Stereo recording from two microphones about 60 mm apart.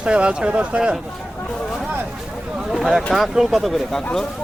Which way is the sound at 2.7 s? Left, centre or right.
Centre.